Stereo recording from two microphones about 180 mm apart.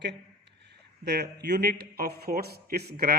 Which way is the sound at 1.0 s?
65° right (ahead or behind).